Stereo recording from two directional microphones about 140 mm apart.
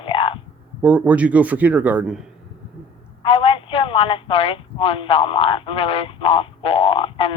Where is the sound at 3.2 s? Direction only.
40° left (ahead or behind).